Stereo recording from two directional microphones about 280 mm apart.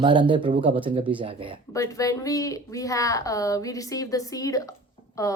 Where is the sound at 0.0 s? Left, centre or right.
Centre.